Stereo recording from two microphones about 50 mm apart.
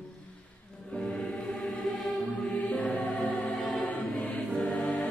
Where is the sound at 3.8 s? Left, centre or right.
Left.